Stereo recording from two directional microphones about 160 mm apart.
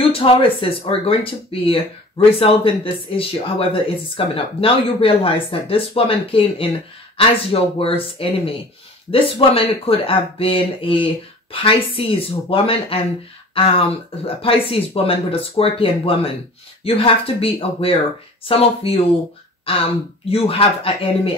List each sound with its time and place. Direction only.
0.1 s speech: 35° left (ahead or behind)